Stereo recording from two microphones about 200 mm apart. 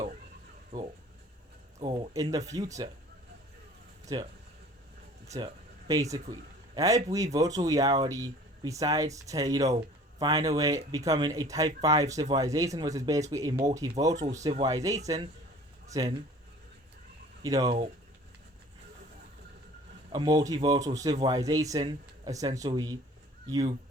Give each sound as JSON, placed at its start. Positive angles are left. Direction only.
{"t": 1.8, "sound": "speech", "side_deg": -20}
{"t": 4.1, "sound": "speech", "side_deg": -20}
{"t": 5.9, "sound": "speech", "side_deg": -15}
{"t": 14.2, "sound": "speech", "side_deg": -35}
{"t": 14.6, "sound": "speech", "side_deg": -15}
{"t": 17.4, "sound": "speech", "side_deg": -20}
{"t": 20.1, "sound": "speech", "side_deg": -20}